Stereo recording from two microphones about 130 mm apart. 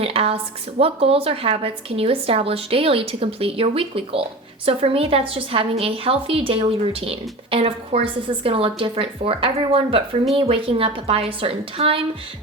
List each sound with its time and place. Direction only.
0.0 s a woman's voice: 50° right (ahead or behind)